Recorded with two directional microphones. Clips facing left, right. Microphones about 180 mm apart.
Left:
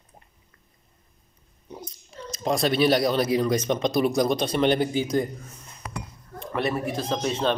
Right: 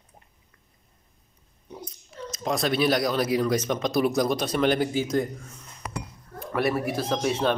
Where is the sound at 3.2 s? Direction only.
25° left (ahead or behind).